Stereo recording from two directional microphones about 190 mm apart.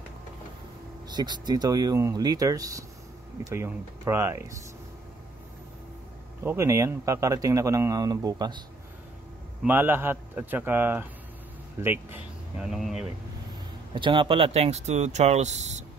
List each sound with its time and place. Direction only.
1.0 s a man's voice: 25° right (ahead or behind)
6.4 s a man's voice: 15° right (ahead or behind)
9.6 s a man's voice: 10° right (ahead or behind)
13.9 s speech: 25° right (ahead or behind)